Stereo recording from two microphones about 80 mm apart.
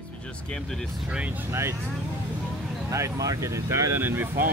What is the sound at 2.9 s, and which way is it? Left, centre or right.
Speech, right.